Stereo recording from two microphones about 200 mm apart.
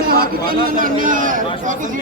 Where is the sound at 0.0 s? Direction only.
45° right (ahead or behind).